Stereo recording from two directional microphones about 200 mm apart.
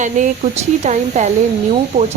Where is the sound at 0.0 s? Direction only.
35° right (ahead or behind).